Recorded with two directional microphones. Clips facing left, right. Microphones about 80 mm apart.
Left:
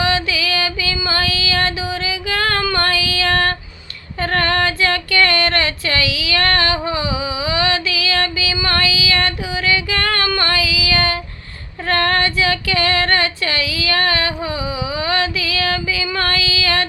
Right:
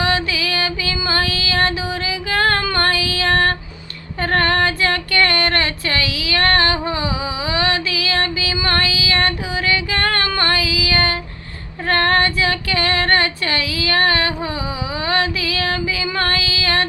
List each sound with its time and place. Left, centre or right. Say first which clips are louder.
0.0 s music: left 1 dB; right
4.2 s female singing: right 1 dB; right